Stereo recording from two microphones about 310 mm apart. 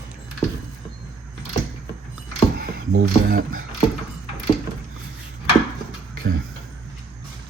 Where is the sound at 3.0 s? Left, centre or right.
Right.